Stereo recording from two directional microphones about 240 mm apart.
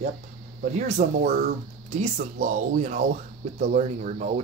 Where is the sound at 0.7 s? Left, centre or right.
Right.